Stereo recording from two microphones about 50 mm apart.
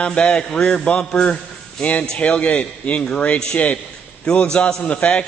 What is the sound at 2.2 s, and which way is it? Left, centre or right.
A man's voice, left.